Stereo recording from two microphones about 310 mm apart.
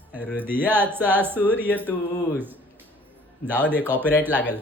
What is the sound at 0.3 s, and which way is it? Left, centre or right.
Speech, centre.